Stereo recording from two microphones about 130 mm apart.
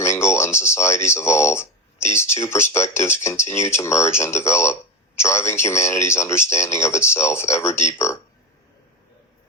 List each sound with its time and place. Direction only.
0.0 s speech: 20° left (ahead or behind)